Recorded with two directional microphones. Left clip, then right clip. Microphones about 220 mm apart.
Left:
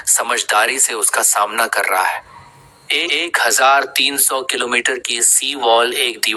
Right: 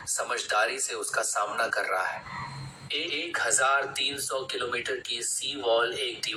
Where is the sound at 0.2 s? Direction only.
45° left (ahead or behind).